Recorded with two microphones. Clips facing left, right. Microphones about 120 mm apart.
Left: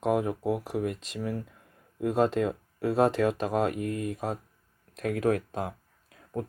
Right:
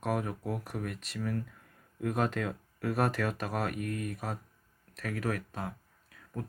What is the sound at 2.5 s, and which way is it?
Speech, 15° left (ahead or behind).